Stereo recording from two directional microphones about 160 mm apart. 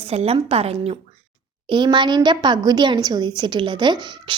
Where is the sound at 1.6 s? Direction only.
30° right (ahead or behind).